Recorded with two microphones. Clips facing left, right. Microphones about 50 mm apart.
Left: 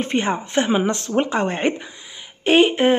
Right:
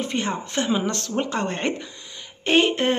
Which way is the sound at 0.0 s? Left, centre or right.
Left.